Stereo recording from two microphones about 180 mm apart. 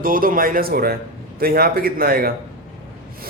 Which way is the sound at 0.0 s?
50° right (ahead or behind).